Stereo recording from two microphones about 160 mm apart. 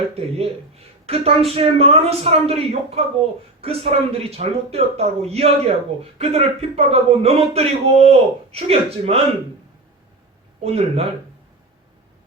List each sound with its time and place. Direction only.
0.1 s speech: 40° right (ahead or behind)
10.6 s speech: 40° right (ahead or behind)